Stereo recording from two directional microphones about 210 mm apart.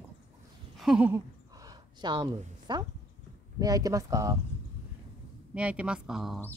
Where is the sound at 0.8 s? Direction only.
5° right (ahead or behind); by 2.8 s 20° right (ahead or behind).